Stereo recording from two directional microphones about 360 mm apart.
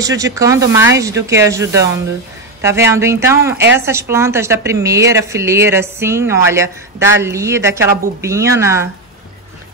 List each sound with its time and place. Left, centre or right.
0.0 s a woman's voice: centre
2.9 s a woman's voice: centre